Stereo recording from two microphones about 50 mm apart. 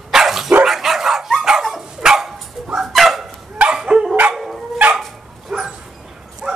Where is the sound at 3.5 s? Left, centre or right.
Centre.